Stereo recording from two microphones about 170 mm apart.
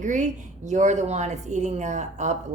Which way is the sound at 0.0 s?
45° right (ahead or behind).